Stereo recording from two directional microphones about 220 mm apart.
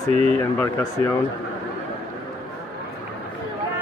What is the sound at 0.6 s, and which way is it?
Speech, 15° left (ahead or behind).